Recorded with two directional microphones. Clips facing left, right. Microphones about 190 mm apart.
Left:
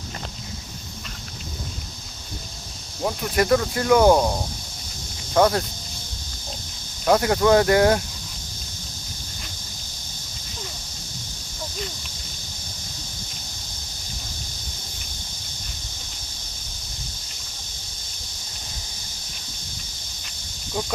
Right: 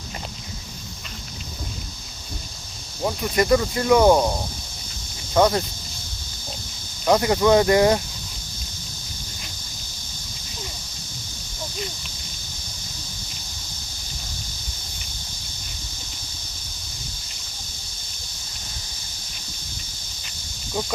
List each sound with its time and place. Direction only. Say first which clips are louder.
3.0 s speech: right 1 dB; centre (ahead or behind)
5.3 s speech: even; centre (ahead or behind)
7.0 s speech: even; centre (ahead or behind)